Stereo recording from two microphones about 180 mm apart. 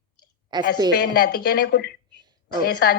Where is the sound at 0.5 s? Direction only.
25° right (ahead or behind).